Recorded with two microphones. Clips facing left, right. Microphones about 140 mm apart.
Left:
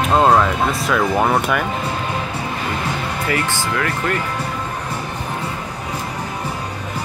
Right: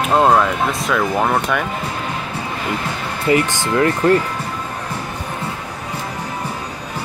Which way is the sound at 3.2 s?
20° right (ahead or behind).